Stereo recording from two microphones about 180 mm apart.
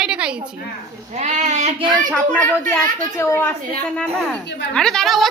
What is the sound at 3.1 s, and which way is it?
Speech, 15° left (ahead or behind).